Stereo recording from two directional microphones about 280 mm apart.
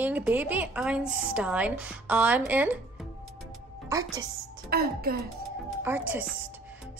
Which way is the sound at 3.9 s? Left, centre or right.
Centre.